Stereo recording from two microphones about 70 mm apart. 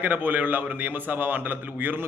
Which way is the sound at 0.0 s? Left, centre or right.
Right.